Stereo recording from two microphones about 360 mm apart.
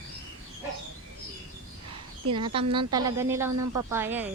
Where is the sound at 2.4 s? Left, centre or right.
Centre.